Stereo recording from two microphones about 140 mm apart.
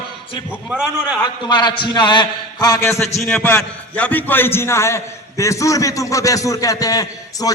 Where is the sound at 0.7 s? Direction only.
5° right (ahead or behind).